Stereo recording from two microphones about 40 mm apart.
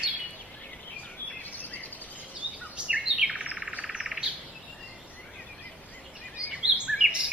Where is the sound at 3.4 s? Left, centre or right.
Right.